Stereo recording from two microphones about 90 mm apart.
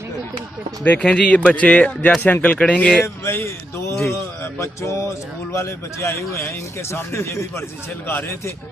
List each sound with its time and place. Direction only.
0.9 s speech: 10° left (ahead or behind)
3.0 s a man's voice: 30° left (ahead or behind)